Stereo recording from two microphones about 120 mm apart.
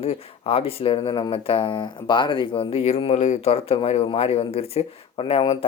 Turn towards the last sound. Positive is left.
turn(degrees=50)  # may be behind; listen again after turning